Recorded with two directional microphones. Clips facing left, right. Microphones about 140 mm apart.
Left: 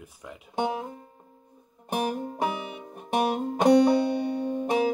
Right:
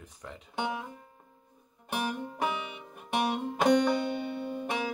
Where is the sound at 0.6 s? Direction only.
40° left (ahead or behind).